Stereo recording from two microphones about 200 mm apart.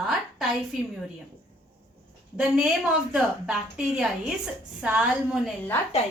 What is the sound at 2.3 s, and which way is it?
A woman's voice, 5° right (ahead or behind).